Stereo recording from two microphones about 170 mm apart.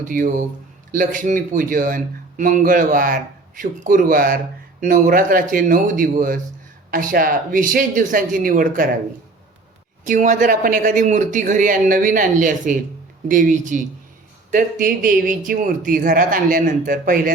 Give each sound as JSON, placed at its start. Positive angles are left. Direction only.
{"t": 0.0, "sound": "speech", "side_deg": -55}
{"t": 10.1, "sound": "speech", "side_deg": -50}